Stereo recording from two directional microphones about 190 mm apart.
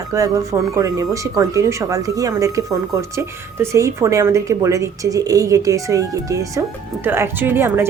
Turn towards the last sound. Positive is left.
turn(degrees=-10)  # may be behind; listen again after turning